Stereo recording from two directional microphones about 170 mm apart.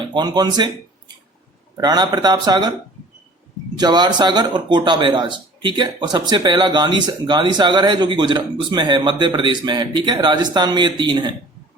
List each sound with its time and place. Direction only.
0.1 s speech: 25° right (ahead or behind)
3.8 s speech: 25° right (ahead or behind)